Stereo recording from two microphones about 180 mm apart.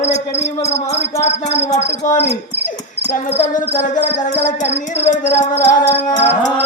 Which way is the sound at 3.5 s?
45° left (ahead or behind).